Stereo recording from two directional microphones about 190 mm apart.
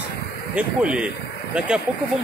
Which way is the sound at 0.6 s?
5° right (ahead or behind).